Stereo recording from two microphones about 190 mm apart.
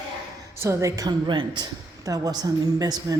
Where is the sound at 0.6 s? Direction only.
15° right (ahead or behind).